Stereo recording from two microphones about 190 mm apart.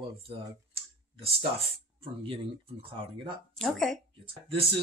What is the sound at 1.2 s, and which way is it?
Speech, 30° right (ahead or behind).